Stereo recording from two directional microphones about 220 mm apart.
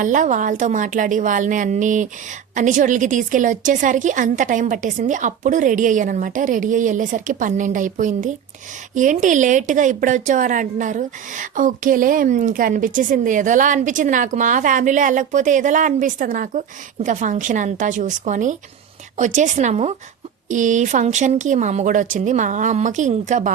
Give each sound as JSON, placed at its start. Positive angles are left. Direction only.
{"t": 0.0, "sound": "a woman's voice", "side_deg": -35}